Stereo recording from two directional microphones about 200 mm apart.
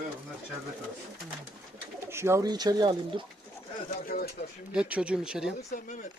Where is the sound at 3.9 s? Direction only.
45° left (ahead or behind).